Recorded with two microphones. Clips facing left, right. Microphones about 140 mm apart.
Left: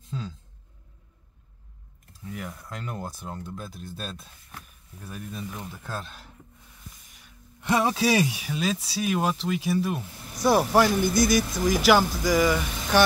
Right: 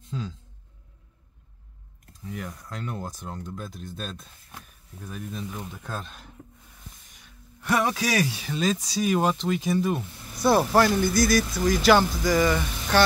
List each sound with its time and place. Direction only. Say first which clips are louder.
0.0 s a sound: right 1 dB; centre (ahead or behind)
2.2 s speech: right 1 dB; 5° left (ahead or behind)
7.1 s gasp: even; 5° left (ahead or behind)
7.6 s speech: left 2 dB; 30° left (ahead or behind)
8.3 s speech: right 2 dB; 10° left (ahead or behind)